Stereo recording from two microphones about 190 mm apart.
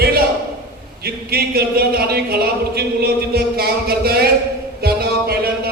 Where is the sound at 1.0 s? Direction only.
55° right (ahead or behind).